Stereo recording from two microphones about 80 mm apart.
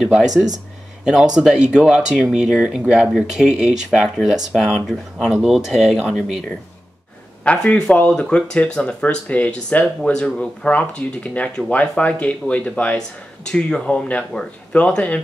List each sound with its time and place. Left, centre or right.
0.0 s speech: centre
7.4 s speech: centre